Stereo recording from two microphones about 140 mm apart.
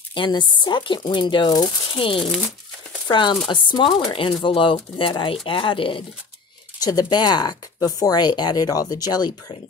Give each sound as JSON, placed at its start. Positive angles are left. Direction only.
{"t": 0.1, "sound": "speech", "side_deg": 35}
{"t": 2.1, "sound": "speech", "side_deg": 0}
{"t": 3.1, "sound": "speech", "side_deg": 35}
{"t": 6.8, "sound": "speech", "side_deg": 30}